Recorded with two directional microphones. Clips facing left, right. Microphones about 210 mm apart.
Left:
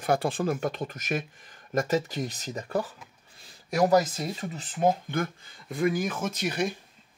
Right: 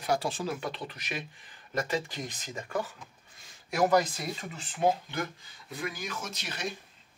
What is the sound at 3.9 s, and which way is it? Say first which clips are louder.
Speech: left 3 dB; 40° left (ahead or behind).